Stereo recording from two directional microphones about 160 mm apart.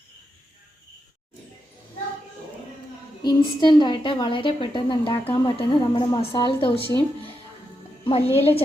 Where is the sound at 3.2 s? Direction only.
25° left (ahead or behind).